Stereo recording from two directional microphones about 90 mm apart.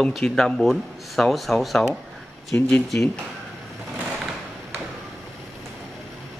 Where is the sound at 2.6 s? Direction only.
15° left (ahead or behind).